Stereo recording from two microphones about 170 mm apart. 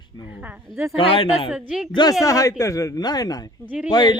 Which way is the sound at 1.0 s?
30° left (ahead or behind).